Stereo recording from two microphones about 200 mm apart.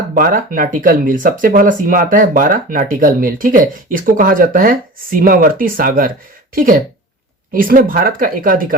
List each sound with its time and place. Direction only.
0.1 s speech: 45° right (ahead or behind)